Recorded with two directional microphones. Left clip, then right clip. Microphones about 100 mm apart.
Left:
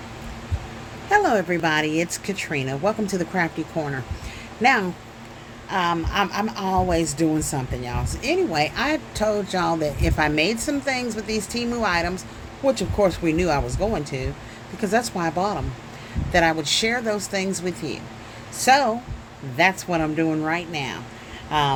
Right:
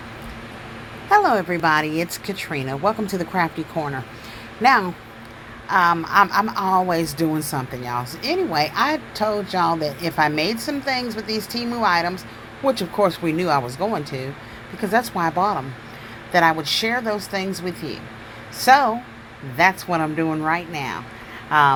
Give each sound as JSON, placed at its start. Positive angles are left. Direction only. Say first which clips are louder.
{"t": 1.1, "sound": "speech", "louder": "right 2 dB", "side_deg": 20}
{"t": 4.6, "sound": "speech", "louder": "right 3 dB", "side_deg": 15}